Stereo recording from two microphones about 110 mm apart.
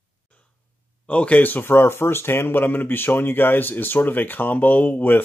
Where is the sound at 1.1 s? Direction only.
10° left (ahead or behind).